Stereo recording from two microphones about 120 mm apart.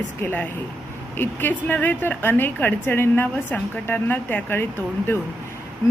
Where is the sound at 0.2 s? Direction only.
15° left (ahead or behind).